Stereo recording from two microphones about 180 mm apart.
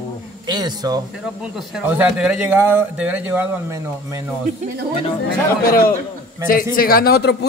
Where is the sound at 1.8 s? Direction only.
5° right (ahead or behind).